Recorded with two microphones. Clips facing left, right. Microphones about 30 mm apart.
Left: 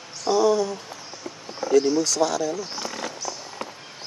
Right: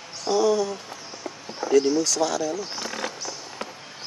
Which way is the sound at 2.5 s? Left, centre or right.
Centre.